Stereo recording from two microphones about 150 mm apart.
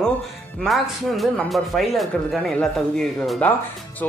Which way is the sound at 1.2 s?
Centre (ahead or behind).